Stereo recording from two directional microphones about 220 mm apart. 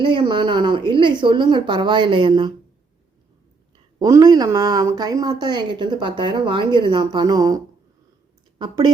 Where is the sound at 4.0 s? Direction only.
15° right (ahead or behind).